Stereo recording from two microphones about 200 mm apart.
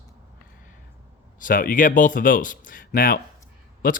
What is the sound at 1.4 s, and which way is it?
Speech, 45° left (ahead or behind).